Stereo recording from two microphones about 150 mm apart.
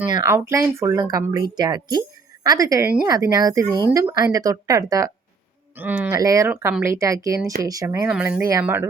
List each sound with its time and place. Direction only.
0.3 s a woman's voice: 15° right (ahead or behind)
5.7 s speech: 10° right (ahead or behind)
6.1 s a woman's voice: 25° right (ahead or behind)
8.1 s speech: 5° right (ahead or behind)
8.4 s a woman's voice: 20° right (ahead or behind)